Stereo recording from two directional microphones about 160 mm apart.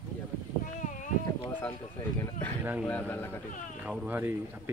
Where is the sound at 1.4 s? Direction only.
10° left (ahead or behind).